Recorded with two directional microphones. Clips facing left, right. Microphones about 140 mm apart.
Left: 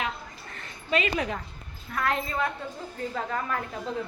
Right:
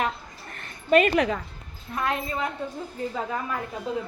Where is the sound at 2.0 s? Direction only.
20° right (ahead or behind).